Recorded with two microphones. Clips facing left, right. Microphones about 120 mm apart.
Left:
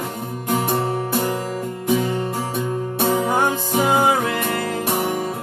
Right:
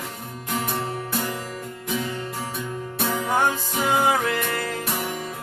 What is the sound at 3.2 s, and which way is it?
Music, 15° left (ahead or behind).